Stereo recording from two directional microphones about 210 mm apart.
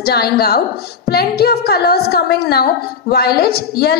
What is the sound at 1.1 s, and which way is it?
A woman's voice, 50° left (ahead or behind).